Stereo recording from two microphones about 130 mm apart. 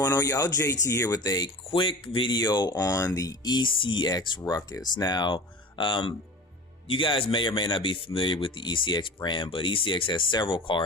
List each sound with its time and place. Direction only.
0.0 s speech: 20° left (ahead or behind)
1.7 s speech: 40° left (ahead or behind)